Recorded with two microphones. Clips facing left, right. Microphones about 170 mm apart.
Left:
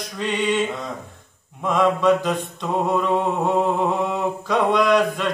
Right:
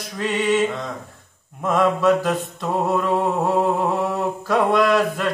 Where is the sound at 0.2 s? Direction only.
5° right (ahead or behind).